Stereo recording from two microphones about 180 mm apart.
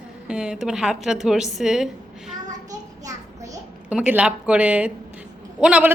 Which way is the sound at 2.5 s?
20° right (ahead or behind).